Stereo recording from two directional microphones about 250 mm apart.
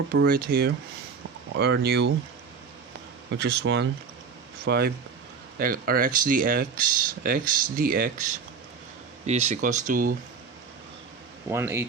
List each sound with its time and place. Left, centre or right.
0.1 s speech: right
3.3 s speech: right
9.2 s speech: right
11.4 s a man's voice: centre